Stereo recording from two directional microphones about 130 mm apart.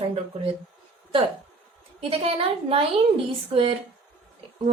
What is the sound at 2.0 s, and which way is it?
Speech, 50° right (ahead or behind).